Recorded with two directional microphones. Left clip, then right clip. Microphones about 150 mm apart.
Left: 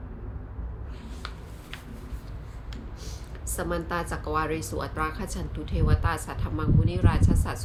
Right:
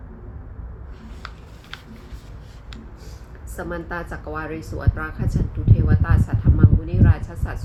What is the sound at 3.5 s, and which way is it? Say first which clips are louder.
A woman's voice: right 1 dB; 20° left (ahead or behind).